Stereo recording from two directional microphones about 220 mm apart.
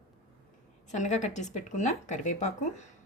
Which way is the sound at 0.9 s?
35° left (ahead or behind).